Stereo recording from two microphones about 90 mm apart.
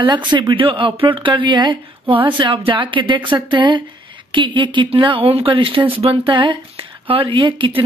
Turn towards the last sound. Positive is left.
turn(degrees=-75)  # may be behind; listen again after turning